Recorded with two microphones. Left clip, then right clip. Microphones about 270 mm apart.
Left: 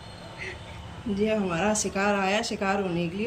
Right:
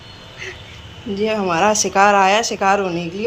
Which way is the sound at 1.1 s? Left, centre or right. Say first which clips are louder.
Right 8 dB; centre.